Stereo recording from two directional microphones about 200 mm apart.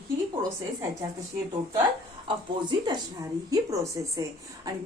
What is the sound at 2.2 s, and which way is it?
A woman's voice, 25° right (ahead or behind).